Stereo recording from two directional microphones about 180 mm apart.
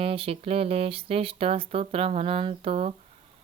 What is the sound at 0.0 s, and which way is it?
Speech, 30° right (ahead or behind).